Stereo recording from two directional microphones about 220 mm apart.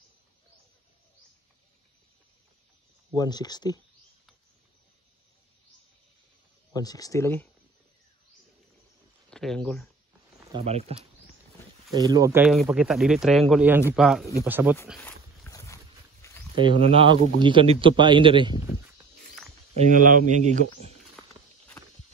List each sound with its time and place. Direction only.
3.2 s speech: 20° left (ahead or behind)
6.7 s speech: 15° left (ahead or behind)
9.3 s speech: 5° left (ahead or behind)
10.5 s a man's voice: 30° right (ahead or behind)
11.9 s speech: 15° right (ahead or behind)
15.0 s dog: 10° left (ahead or behind)
16.5 s a man's voice: 25° right (ahead or behind)
19.7 s speech: 35° right (ahead or behind)